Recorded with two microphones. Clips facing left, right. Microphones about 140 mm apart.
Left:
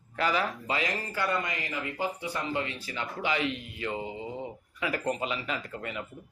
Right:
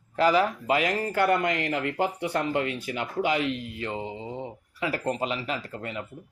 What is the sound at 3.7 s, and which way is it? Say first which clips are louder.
Speech: right 1 dB; 30° right (ahead or behind).